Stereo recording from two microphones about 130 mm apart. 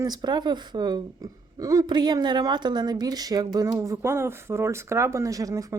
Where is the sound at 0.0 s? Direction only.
35° right (ahead or behind).